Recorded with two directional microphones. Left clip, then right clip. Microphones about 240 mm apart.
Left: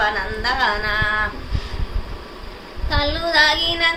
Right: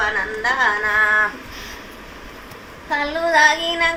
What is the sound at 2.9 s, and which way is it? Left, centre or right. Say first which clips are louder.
A woman's voice: right 2 dB; centre.